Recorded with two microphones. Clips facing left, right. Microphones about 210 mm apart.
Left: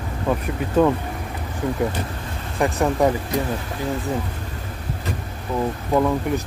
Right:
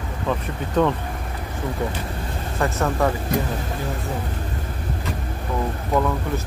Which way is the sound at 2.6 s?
15° left (ahead or behind).